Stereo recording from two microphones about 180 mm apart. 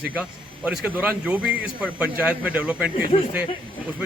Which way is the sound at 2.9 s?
30° left (ahead or behind).